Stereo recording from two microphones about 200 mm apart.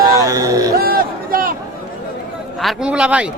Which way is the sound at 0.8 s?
50° right (ahead or behind).